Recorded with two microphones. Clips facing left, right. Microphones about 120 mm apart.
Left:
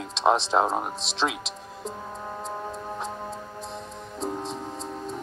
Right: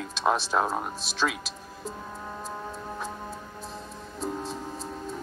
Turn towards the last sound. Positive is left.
turn(degrees=25)  # may be behind; listen again after turning